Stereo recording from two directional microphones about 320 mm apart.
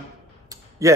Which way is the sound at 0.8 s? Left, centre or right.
Centre.